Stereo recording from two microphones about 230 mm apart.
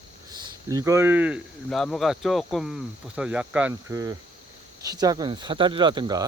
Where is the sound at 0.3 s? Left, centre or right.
Centre.